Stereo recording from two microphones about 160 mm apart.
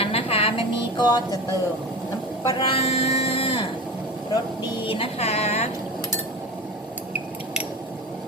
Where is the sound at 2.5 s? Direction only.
30° left (ahead or behind).